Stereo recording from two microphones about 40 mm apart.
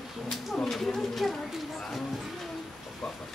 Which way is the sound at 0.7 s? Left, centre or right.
Centre.